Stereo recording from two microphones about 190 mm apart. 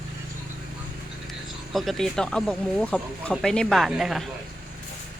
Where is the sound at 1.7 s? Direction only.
Centre (ahead or behind).